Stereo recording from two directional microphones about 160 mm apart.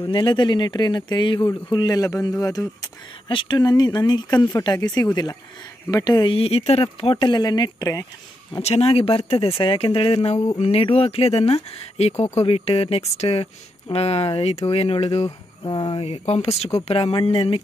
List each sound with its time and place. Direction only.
0.0 s speech: 30° left (ahead or behind)
8.6 s speech: 35° left (ahead or behind)
15.2 s speech: 25° left (ahead or behind)